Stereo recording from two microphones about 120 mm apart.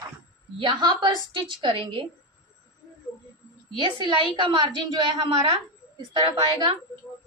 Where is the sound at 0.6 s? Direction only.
40° right (ahead or behind).